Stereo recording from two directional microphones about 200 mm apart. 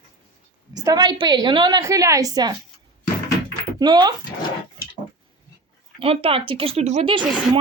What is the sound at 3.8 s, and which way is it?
Speech, 20° right (ahead or behind).